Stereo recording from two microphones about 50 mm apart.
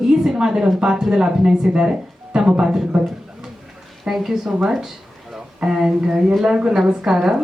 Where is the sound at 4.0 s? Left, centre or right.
Centre.